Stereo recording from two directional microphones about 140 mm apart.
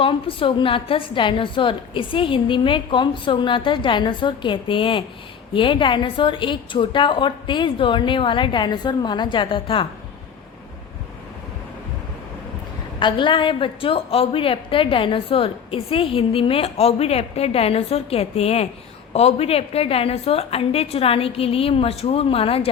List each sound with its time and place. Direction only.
0.0 s a woman's voice: 40° left (ahead or behind)
13.0 s a woman's voice: 35° left (ahead or behind)